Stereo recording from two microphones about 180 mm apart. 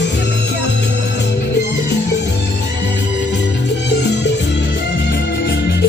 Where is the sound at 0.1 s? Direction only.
75° left (ahead or behind).